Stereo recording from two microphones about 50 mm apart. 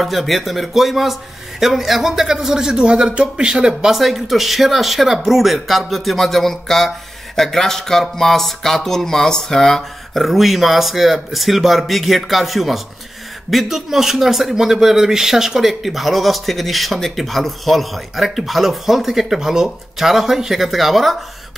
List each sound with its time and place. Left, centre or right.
0.0 s speech: centre